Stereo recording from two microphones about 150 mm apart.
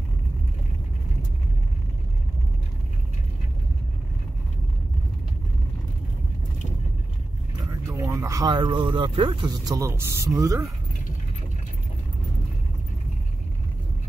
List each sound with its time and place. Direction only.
7.9 s speech: 20° right (ahead or behind)